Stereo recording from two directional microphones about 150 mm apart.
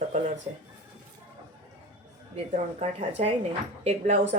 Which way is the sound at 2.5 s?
45° right (ahead or behind).